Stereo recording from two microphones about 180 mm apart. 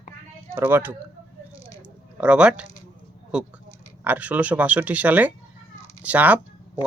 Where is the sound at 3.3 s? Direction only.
5° right (ahead or behind).